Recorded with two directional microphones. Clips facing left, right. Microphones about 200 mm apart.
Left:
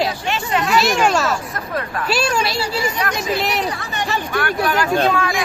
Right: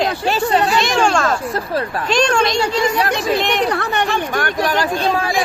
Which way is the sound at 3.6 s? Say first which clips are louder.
Right 6 dB; 60° right (ahead or behind).